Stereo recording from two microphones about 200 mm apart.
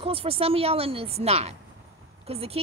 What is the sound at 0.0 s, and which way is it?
Speech, 30° right (ahead or behind).